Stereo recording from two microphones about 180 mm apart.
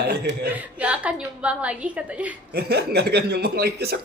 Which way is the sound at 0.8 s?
5° right (ahead or behind).